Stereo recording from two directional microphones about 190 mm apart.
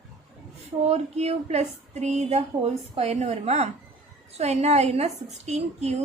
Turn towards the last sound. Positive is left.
turn(degrees=-35)  # may be behind; listen again after turning